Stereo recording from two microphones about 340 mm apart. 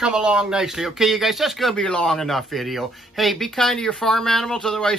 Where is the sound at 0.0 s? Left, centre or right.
Centre.